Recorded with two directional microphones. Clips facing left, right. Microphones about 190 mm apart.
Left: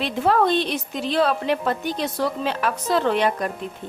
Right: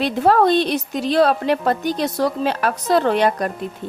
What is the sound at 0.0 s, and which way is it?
A woman's voice, 40° right (ahead or behind).